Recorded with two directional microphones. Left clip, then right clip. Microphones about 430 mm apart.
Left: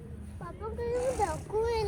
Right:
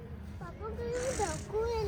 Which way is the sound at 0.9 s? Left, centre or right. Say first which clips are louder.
Left 4 dB; centre.